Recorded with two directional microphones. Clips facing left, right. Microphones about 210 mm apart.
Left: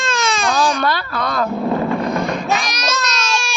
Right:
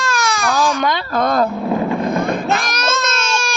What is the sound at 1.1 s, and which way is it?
Speech, 45° right (ahead or behind).